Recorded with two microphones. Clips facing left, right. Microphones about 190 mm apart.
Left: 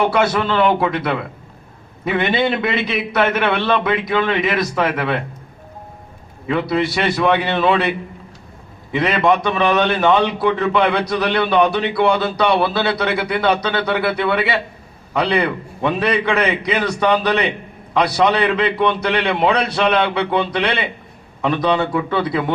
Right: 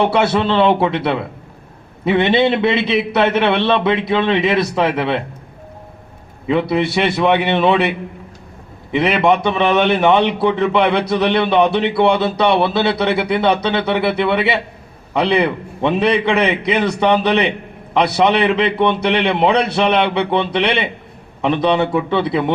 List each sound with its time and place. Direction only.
0.0 s a man's voice: 25° right (ahead or behind)
6.5 s a man's voice: 20° right (ahead or behind)